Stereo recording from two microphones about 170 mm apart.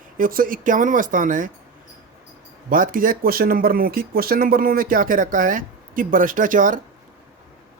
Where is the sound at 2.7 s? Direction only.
55° right (ahead or behind).